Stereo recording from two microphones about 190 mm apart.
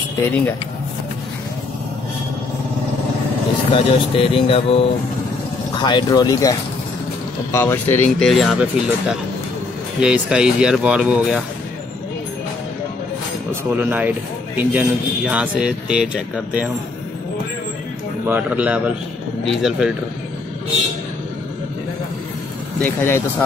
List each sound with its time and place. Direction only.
0.2 s speech: 10° left (ahead or behind)
3.7 s speech: 30° left (ahead or behind)
7.5 s speech: 10° left (ahead or behind); by 11.4 s 5° right (ahead or behind)
13.7 s a man's voice: 10° right (ahead or behind)
18.2 s a man's voice: 10° right (ahead or behind)
22.8 s speech: 10° left (ahead or behind)